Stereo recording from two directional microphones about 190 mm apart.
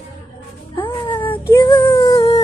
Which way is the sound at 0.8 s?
25° left (ahead or behind).